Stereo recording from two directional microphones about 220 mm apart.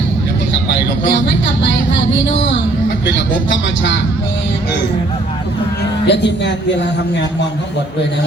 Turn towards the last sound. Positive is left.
turn(degrees=50)  # may be behind; listen again after turning